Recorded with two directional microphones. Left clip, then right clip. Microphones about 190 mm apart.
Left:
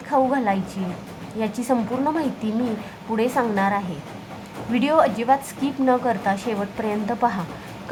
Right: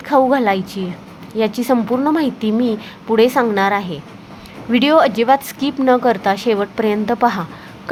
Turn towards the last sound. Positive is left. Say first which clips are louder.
# right 6 dB
turn(degrees=-30)  # may be behind; listen again after turning